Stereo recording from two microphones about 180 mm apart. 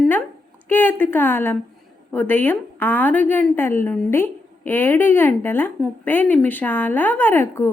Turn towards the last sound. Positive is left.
turn(degrees=10)  # may be behind; listen again after turning